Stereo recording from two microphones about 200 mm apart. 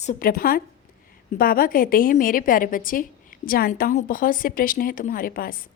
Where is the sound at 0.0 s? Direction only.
40° left (ahead or behind).